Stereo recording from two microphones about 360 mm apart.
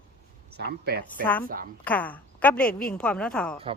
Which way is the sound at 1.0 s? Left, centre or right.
Centre.